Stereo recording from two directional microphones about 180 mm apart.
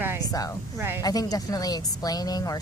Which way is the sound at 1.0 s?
20° left (ahead or behind).